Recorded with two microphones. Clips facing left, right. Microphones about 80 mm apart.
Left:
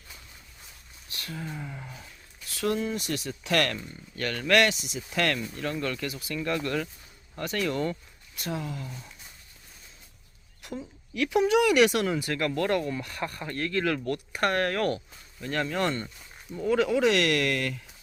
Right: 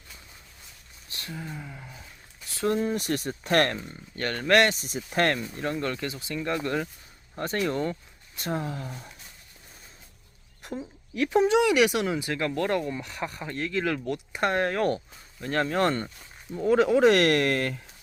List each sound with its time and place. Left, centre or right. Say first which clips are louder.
1.4 s speech: left 3 dB; centre
2.5 s speech: right 2 dB; right
2.9 s speech: right 3 dB; right
5.4 s speech: right 1 dB; right
8.4 s speech: right 3 dB; right
11.1 s speech: right 1 dB; right